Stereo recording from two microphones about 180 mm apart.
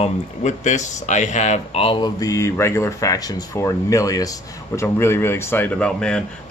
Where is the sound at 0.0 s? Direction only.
40° left (ahead or behind).